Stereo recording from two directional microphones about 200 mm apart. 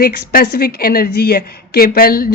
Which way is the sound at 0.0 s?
50° left (ahead or behind).